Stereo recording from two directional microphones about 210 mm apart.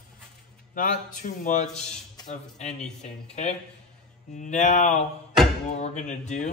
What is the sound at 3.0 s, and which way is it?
A man's voice, 30° left (ahead or behind).